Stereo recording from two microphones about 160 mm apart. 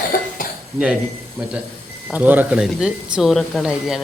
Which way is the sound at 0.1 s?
60° left (ahead or behind).